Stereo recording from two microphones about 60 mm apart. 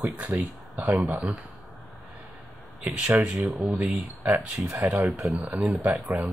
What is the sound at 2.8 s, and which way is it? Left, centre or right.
Speech, right.